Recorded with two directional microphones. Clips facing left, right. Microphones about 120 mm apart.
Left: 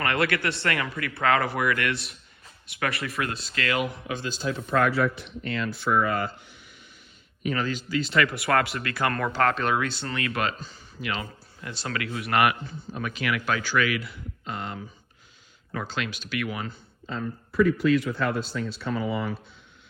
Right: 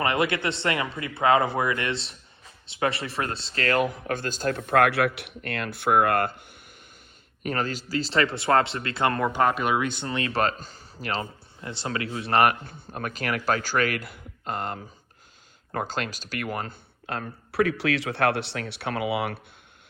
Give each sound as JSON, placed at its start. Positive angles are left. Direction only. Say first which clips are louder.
{"t": 0.0, "sound": "speech", "louder": "right 1 dB", "side_deg": -20}
{"t": 7.4, "sound": "speech", "louder": "even", "side_deg": -45}
{"t": 10.6, "sound": "speech", "louder": "left 1 dB", "side_deg": -40}
{"t": 11.6, "sound": "speech", "louder": "right 2 dB", "side_deg": -25}
{"t": 12.6, "sound": "speech", "louder": "even", "side_deg": -55}
{"t": 17.1, "sound": "speech", "louder": "left 1 dB", "side_deg": -70}